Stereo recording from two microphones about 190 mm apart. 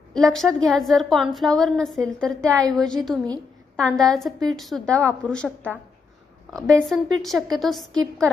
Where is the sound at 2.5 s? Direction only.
20° right (ahead or behind).